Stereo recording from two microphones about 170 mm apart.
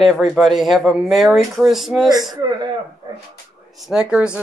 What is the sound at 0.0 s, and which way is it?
Speech, centre (ahead or behind).